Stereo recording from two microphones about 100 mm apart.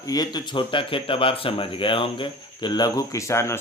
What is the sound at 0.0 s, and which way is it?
Speech, 40° left (ahead or behind).